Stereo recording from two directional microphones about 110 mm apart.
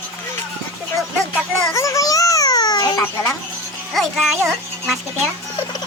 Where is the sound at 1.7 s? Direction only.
30° left (ahead or behind).